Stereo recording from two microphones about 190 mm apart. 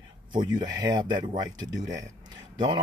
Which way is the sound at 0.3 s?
25° right (ahead or behind).